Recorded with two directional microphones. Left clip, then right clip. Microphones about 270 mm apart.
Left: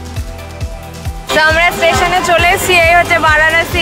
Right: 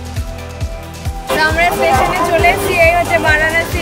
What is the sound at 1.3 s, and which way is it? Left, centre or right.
Music, centre.